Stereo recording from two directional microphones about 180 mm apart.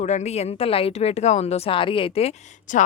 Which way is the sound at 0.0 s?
40° left (ahead or behind).